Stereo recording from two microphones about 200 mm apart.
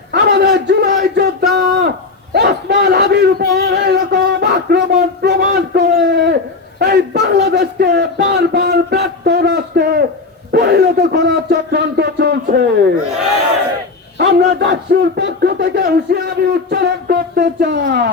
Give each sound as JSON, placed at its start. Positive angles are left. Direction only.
{"t": 0.1, "sound": "a man's voice", "side_deg": -55}
{"t": 1.5, "sound": "a sound", "side_deg": -60}
{"t": 14.2, "sound": "a man's voice", "side_deg": -55}